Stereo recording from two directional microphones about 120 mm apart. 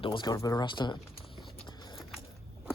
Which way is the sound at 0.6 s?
40° left (ahead or behind).